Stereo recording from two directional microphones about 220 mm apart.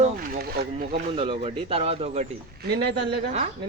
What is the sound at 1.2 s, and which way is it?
A man's voice, 25° right (ahead or behind).